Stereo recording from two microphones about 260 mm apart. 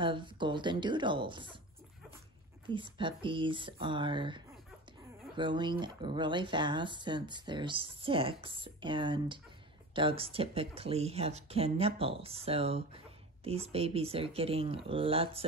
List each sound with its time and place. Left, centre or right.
0.0 s speech: centre
2.7 s speech: centre